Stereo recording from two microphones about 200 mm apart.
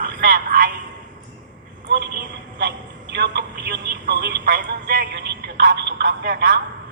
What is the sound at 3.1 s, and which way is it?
Speech, 60° right (ahead or behind).